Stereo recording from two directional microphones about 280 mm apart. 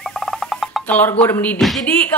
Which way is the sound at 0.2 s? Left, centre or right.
Centre.